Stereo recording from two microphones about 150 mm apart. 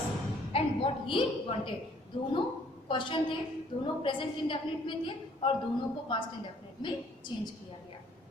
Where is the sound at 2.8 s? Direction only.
35° left (ahead or behind).